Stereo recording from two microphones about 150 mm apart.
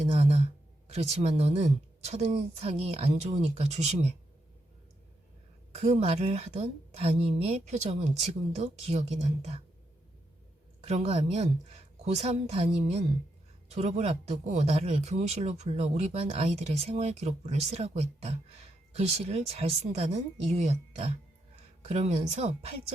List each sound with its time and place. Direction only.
0.0 s a sound: 45° right (ahead or behind)
0.9 s speech: 45° right (ahead or behind)
5.7 s speech: 50° right (ahead or behind)
10.8 s speech: 45° right (ahead or behind)